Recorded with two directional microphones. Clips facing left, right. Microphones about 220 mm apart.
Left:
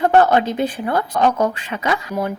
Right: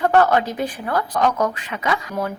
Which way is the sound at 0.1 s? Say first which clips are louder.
Left 2 dB; 25° left (ahead or behind).